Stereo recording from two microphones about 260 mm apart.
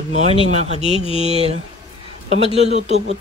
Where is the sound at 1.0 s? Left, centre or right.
Left.